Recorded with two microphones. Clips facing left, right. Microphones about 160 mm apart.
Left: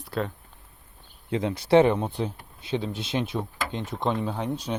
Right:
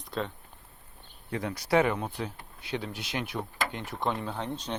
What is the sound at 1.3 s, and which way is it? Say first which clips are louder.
Speech: left 7 dB; 20° left (ahead or behind).